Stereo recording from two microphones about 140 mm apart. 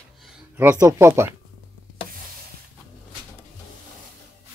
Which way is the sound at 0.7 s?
20° right (ahead or behind).